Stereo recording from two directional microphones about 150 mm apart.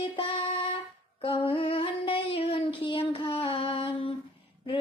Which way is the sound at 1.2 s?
35° left (ahead or behind).